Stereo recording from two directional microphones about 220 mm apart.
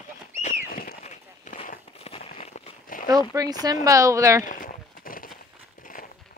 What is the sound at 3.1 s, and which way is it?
Speech, 15° right (ahead or behind).